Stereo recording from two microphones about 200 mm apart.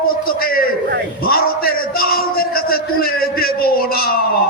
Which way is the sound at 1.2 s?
50° left (ahead or behind).